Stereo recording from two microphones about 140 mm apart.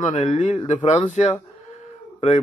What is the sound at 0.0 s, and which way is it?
Speech, 50° left (ahead or behind).